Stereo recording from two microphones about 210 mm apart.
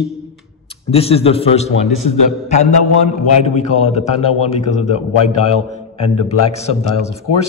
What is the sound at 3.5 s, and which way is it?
A man's voice, 30° left (ahead or behind).